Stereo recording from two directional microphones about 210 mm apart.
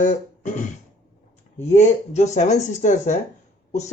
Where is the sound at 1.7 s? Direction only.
35° left (ahead or behind).